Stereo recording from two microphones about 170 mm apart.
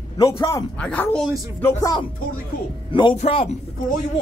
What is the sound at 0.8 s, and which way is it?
Speech, 5° left (ahead or behind).